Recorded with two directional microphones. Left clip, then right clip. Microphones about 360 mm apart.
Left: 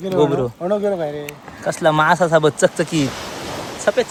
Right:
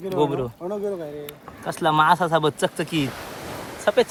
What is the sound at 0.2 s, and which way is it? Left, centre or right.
Speech, centre.